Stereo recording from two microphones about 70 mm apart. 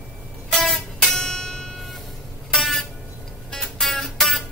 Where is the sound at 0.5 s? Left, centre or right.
Centre.